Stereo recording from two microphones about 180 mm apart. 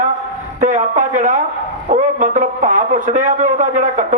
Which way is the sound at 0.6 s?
45° right (ahead or behind).